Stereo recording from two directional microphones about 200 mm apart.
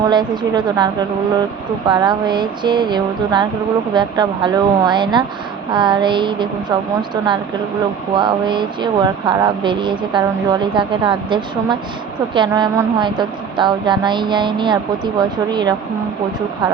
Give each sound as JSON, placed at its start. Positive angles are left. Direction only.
{"t": 0.1, "sound": "speech", "side_deg": -20}
{"t": 1.9, "sound": "speech", "side_deg": -20}